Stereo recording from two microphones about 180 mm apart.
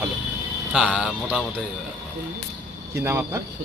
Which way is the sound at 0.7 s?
5° right (ahead or behind).